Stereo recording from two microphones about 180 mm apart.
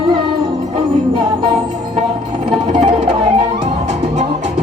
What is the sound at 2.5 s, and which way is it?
Music, 30° right (ahead or behind).